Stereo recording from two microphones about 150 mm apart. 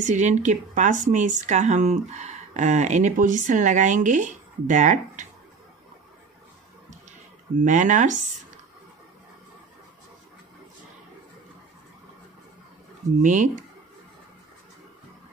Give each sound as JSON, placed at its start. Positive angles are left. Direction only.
{"t": 0.0, "sound": "speech", "side_deg": -55}
{"t": 7.6, "sound": "speech", "side_deg": -55}
{"t": 13.2, "sound": "speech", "side_deg": -55}